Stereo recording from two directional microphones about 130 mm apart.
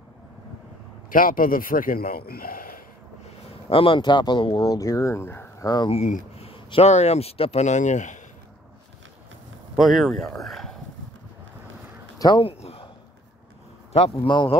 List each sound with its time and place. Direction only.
1.1 s a man's voice: 90° left
3.4 s speech: 45° left (ahead or behind); by 5.7 s 20° left (ahead or behind)
5.9 s speech: 65° left (ahead or behind)
6.3 s a sound: 45° left (ahead or behind)
6.9 s speech: 55° left (ahead or behind)
7.6 s speech: 65° left (ahead or behind)
9.8 s speech: centre (ahead or behind)
12.2 s a man's voice: 35° left (ahead or behind)
12.5 s a sound: 50° left (ahead or behind)
13.9 s a man's voice: 40° left (ahead or behind)